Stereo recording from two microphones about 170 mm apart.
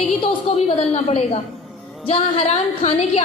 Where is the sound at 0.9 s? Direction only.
40° left (ahead or behind).